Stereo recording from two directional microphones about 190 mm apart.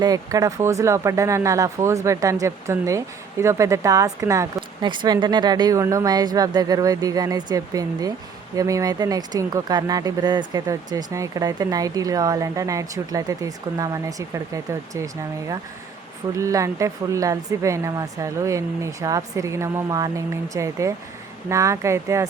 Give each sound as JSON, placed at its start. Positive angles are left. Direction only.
{"t": 0.0, "sound": "speech", "side_deg": -20}